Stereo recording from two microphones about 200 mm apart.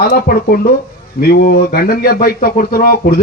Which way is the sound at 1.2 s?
50° left (ahead or behind).